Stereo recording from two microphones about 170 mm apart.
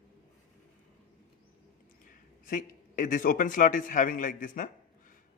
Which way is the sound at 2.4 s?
50° left (ahead or behind).